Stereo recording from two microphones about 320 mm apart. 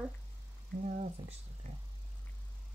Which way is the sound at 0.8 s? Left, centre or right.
Right.